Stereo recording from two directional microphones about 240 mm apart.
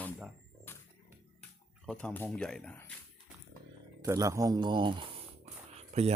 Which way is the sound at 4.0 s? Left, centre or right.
Centre.